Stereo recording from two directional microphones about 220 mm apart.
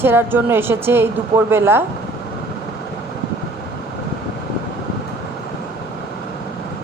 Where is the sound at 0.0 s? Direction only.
10° right (ahead or behind).